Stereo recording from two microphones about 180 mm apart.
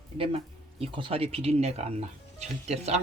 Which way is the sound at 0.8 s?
30° right (ahead or behind).